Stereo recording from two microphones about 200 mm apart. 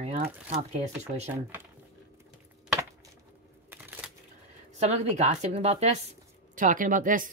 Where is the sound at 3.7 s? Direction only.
10° right (ahead or behind).